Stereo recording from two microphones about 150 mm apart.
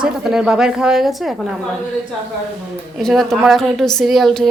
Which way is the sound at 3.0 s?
Centre (ahead or behind).